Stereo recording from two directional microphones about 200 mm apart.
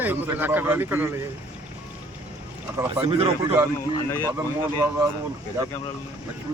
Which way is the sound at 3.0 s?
30° right (ahead or behind).